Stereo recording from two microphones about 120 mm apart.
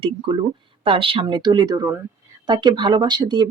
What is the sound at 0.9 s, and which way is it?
Speech, 50° right (ahead or behind).